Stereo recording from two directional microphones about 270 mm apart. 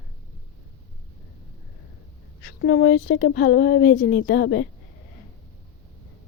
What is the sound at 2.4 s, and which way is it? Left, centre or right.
Speech, left.